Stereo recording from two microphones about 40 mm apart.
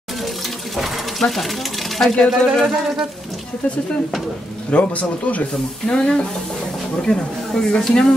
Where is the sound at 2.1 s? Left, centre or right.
Centre.